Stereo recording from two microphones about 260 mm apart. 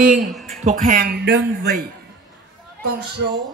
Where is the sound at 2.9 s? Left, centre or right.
Right.